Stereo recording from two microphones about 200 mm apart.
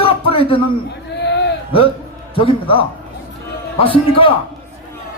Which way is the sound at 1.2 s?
60° left (ahead or behind).